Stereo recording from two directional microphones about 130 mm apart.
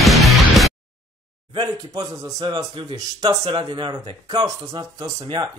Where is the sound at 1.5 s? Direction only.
40° right (ahead or behind).